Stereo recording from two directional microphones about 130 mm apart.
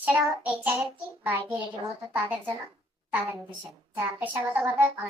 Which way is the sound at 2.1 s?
10° right (ahead or behind).